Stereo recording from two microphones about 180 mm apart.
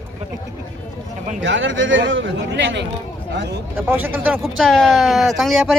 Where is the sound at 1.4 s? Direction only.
90° right; by 3.6 s 70° right (ahead or behind).